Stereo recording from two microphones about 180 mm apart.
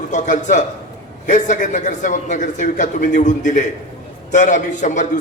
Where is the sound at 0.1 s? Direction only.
45° left (ahead or behind).